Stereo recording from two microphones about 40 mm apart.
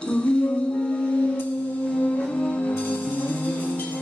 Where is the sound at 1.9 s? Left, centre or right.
Left.